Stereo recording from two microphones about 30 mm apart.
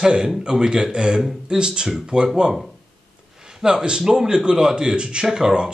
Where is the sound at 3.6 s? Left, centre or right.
Right.